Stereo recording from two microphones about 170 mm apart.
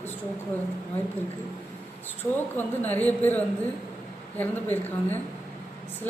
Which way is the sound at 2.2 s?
10° left (ahead or behind).